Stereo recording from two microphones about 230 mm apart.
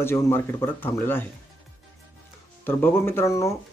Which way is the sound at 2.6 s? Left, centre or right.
Centre.